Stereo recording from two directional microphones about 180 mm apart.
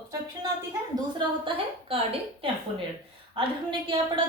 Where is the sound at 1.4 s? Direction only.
30° right (ahead or behind).